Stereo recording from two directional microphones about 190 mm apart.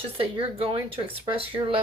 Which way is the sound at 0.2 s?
30° right (ahead or behind).